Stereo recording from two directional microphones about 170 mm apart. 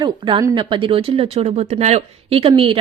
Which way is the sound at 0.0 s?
30° right (ahead or behind).